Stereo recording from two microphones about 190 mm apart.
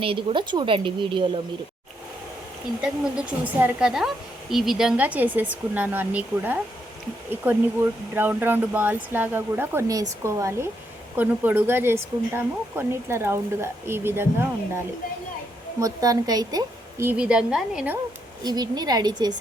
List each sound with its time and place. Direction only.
0.0 s speech: 25° right (ahead or behind)
2.8 s a woman's voice: 5° right (ahead or behind)
8.1 s a woman's voice: 10° right (ahead or behind)
18.4 s speech: 20° right (ahead or behind)